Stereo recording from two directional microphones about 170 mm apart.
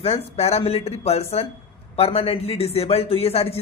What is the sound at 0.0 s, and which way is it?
A man's voice, 40° left (ahead or behind).